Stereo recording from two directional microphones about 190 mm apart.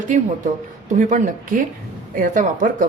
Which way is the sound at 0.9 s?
40° right (ahead or behind).